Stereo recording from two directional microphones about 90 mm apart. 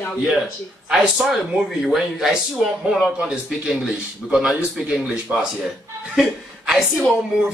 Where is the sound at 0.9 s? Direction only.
5° right (ahead or behind).